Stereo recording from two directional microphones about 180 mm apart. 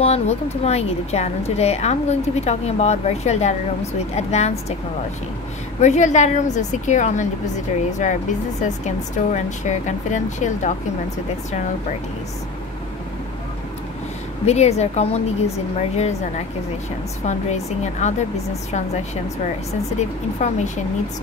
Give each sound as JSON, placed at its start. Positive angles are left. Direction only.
{"t": 0.0, "sound": "a woman's voice", "side_deg": 35}
{"t": 5.8, "sound": "a woman's voice", "side_deg": 40}
{"t": 14.4, "sound": "a woman's voice", "side_deg": 35}
{"t": 20.0, "sound": "a woman's voice", "side_deg": 40}